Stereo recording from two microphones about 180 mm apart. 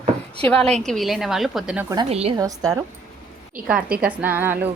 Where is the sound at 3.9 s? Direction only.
55° right (ahead or behind).